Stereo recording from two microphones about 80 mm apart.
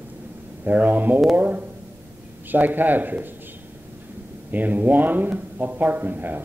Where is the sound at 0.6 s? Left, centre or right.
Right.